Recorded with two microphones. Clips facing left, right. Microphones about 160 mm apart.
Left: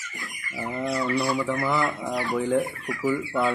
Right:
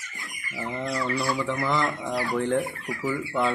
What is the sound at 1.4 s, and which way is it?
Speech, 5° left (ahead or behind).